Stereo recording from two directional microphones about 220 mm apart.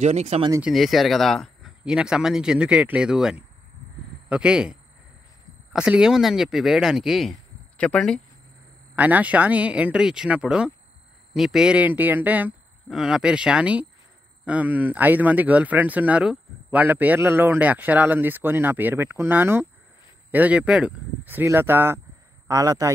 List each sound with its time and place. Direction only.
0.0 s speech: 30° right (ahead or behind)
0.5 s speech: 5° right (ahead or behind)
8.9 s speech: 5° right (ahead or behind)